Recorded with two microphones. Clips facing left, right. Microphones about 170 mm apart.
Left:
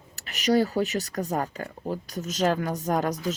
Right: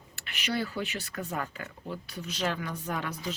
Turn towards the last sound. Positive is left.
turn(degrees=40)  # may be behind; listen again after turning